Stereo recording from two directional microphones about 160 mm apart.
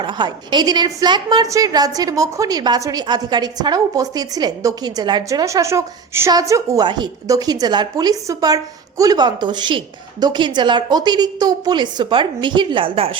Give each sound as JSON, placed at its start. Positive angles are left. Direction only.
{"t": 0.0, "sound": "a woman's voice", "side_deg": -30}